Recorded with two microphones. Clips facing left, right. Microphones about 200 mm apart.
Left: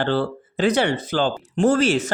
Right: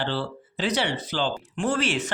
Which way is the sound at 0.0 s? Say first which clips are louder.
Left 7 dB; 50° left (ahead or behind).